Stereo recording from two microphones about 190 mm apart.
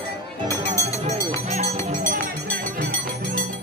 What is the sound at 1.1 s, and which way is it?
Music, 35° right (ahead or behind).